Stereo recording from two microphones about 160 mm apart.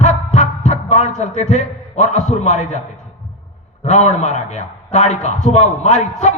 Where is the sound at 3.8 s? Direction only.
45° left (ahead or behind).